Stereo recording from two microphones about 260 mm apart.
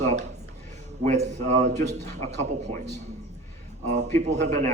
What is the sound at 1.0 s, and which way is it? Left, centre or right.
A man's voice, right.